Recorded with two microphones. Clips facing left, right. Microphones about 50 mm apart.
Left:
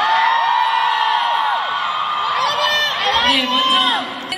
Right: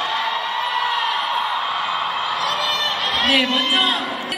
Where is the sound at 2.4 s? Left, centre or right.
Left.